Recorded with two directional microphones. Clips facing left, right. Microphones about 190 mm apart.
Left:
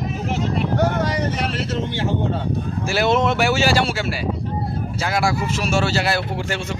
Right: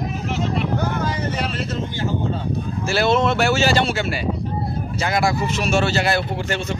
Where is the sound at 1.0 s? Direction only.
85° left.